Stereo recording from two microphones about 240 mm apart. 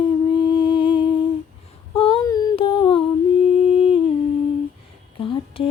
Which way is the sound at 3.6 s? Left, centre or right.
Left.